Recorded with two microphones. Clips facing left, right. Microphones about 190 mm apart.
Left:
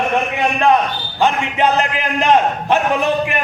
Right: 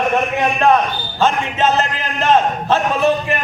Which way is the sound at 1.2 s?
15° left (ahead or behind).